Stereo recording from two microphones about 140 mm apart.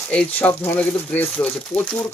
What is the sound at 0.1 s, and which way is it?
Speech, 10° left (ahead or behind).